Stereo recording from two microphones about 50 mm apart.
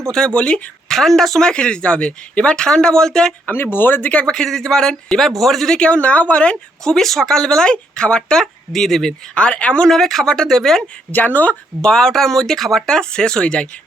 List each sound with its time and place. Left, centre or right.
0.1 s speech: centre
0.9 s speech: centre
3.4 s speech: left
4.3 s speech: centre
5.7 s speech: centre
6.8 s speech: centre
9.3 s speech: left
9.9 s speech: centre
11.1 s speech: left
11.8 s speech: centre